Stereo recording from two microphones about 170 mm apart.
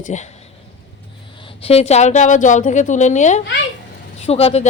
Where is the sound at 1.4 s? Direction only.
35° left (ahead or behind).